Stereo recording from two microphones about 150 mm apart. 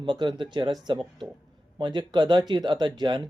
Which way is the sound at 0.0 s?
30° right (ahead or behind).